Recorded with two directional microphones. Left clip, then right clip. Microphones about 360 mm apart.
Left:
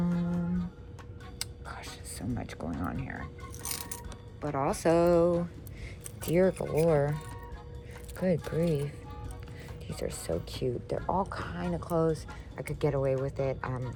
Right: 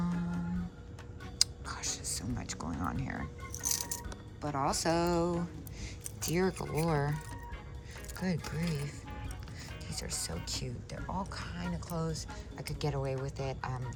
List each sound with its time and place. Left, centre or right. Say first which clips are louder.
0.0 s music: left 4 dB; centre
1.4 s music: right 8 dB; centre
3.6 s music: right 4 dB; centre
4.4 s speech: left 2 dB; centre
8.2 s speech: left 10 dB; centre